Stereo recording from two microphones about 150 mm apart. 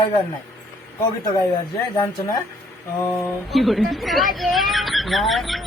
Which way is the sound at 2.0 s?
25° left (ahead or behind).